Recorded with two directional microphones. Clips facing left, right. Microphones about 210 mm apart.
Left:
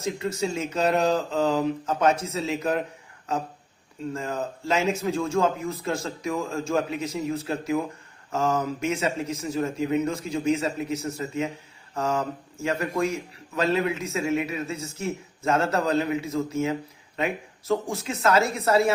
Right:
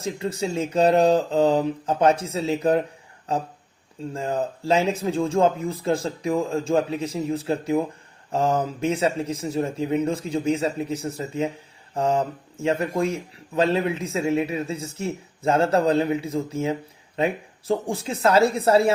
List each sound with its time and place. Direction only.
0.0 s a man's voice: 30° right (ahead or behind)